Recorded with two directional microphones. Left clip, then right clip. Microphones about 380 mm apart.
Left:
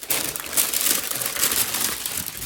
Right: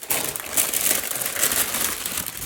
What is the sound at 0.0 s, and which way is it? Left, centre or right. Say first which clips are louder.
Crushing: even; centre.